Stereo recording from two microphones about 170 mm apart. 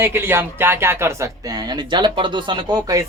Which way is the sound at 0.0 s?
15° right (ahead or behind).